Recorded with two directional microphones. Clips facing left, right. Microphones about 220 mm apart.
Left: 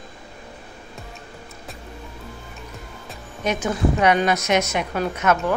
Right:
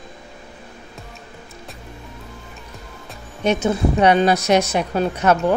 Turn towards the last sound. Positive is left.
turn(degrees=-35)  # may be behind; listen again after turning